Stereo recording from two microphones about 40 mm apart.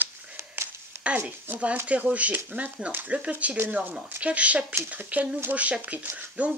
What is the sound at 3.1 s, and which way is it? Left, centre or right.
Speech, right.